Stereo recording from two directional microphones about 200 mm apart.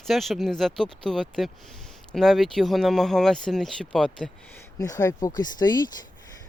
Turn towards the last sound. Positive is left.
turn(degrees=20)  # may be behind; listen again after turning